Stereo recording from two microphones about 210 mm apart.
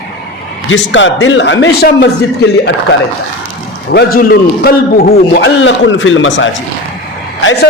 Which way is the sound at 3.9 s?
45° left (ahead or behind).